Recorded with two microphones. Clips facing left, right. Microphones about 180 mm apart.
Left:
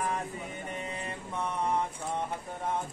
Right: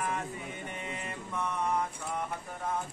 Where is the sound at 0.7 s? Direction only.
35° left (ahead or behind).